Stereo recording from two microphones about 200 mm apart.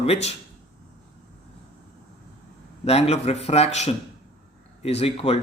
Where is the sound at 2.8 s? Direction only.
30° left (ahead or behind).